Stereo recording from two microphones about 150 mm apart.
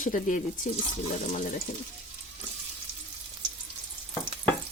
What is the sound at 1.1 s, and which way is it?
Speech, 50° left (ahead or behind).